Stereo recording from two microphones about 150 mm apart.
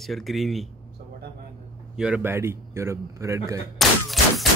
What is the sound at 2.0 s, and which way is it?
A man's voice, 10° right (ahead or behind).